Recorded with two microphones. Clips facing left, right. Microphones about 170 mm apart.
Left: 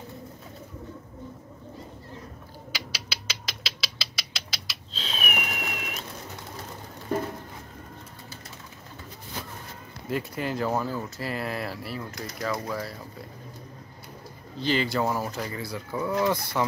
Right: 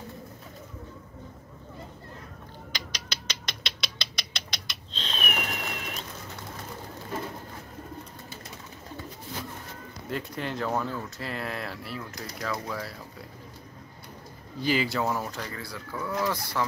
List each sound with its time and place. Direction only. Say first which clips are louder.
2.7 s mechanisms: left 1 dB; 5° left (ahead or behind)
10.0 s speech: left 3 dB; 5° left (ahead or behind)
14.6 s speech: left 1 dB; 5° right (ahead or behind)
15.4 s speech: left 4 dB; 20° left (ahead or behind)